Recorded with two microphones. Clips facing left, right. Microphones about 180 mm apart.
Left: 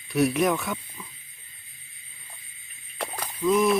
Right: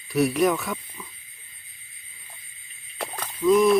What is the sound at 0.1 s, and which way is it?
Speech, centre (ahead or behind).